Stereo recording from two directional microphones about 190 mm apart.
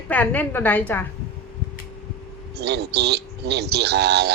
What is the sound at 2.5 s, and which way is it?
A man's voice, 60° right (ahead or behind).